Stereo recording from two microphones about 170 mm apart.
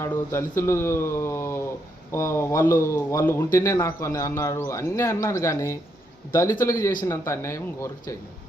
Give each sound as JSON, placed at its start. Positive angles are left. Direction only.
{"t": 0.0, "sound": "a man's voice", "side_deg": 15}